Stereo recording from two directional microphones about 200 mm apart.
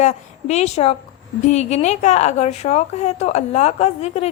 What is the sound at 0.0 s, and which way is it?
A woman's voice, 35° left (ahead or behind).